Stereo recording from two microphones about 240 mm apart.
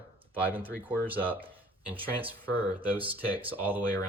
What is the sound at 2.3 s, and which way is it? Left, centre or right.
Speech, centre.